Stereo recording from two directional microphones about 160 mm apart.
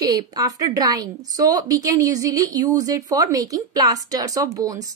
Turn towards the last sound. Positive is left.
turn(degrees=-20)  # may be behind; listen again after turning